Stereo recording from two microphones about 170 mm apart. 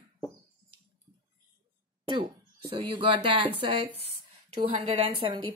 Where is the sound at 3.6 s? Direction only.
30° right (ahead or behind).